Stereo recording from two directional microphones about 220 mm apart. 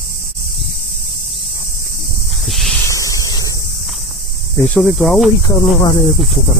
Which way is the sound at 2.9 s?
15° left (ahead or behind).